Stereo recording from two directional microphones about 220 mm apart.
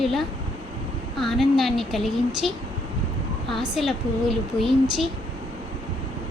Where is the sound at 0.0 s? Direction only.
Centre (ahead or behind).